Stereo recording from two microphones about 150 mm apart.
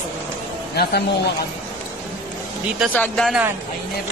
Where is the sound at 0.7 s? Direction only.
90° left.